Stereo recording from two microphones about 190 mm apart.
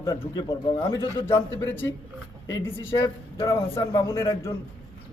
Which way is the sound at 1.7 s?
10° left (ahead or behind).